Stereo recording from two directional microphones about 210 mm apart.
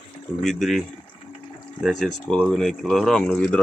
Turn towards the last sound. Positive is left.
turn(degrees=5)  # may be behind; listen again after turning